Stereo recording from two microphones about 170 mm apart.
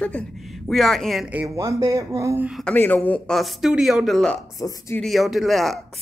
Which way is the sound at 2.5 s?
5° left (ahead or behind).